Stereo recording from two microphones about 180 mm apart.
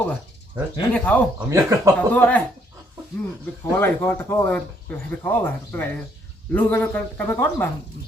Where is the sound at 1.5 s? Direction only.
15° right (ahead or behind).